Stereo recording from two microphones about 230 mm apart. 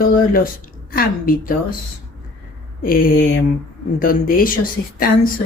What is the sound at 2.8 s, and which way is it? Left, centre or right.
Speech, left.